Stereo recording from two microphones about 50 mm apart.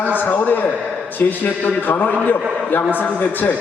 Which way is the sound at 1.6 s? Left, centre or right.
Left.